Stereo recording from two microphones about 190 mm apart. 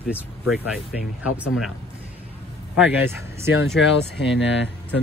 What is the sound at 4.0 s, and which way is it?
Speech, 70° left (ahead or behind).